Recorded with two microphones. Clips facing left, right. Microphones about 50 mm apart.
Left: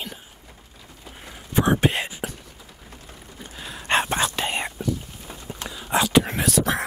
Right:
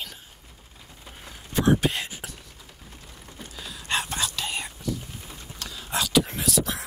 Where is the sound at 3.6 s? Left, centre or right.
Left.